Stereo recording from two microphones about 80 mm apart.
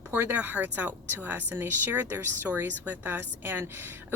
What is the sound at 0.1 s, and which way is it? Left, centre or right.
Speech, right.